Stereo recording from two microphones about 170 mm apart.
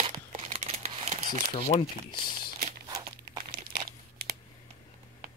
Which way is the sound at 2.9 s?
25° right (ahead or behind).